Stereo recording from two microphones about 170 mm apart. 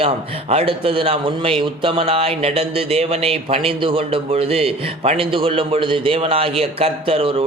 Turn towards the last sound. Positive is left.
turn(degrees=-35)  # may be behind; listen again after turning